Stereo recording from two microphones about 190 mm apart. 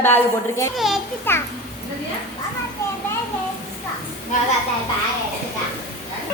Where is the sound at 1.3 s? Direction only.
10° left (ahead or behind).